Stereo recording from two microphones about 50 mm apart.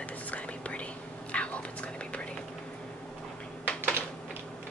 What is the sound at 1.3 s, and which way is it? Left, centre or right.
Whispering, left.